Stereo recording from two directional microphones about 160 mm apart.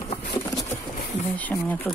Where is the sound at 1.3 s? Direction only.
10° left (ahead or behind).